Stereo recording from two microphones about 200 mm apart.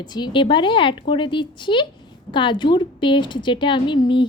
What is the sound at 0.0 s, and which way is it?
A woman's voice, 20° left (ahead or behind).